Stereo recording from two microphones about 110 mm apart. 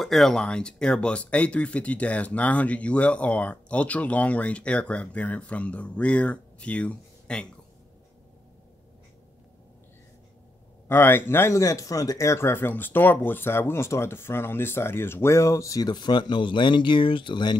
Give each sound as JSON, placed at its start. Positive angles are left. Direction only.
{"t": 0.0, "sound": "speech", "side_deg": 0}
{"t": 10.9, "sound": "speech", "side_deg": 20}